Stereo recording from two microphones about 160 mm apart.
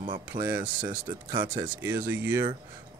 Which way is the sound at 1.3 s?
30° right (ahead or behind).